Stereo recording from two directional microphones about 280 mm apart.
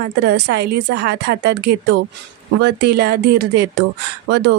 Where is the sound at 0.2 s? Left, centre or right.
Right.